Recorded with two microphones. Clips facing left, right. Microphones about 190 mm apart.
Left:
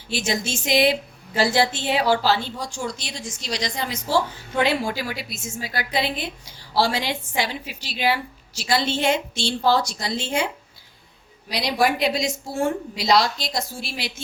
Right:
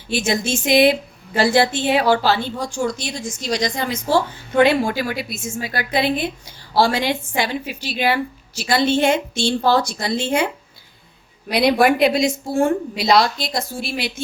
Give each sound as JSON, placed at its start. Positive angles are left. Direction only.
{"t": 0.1, "sound": "a woman's voice", "side_deg": -55}